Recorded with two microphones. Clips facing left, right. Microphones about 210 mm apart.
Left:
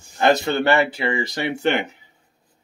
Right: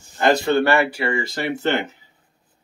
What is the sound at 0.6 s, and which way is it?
Speech, 20° left (ahead or behind).